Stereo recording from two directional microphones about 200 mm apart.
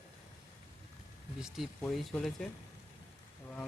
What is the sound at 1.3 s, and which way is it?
Speech, centre (ahead or behind).